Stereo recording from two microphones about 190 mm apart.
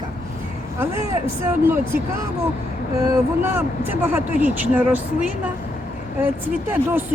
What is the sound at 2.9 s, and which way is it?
Speech, 15° right (ahead or behind).